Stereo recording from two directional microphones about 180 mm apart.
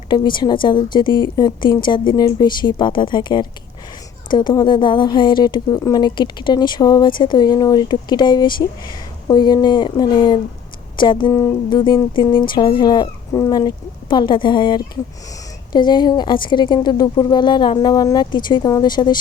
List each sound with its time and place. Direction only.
0.1 s speech: 25° left (ahead or behind)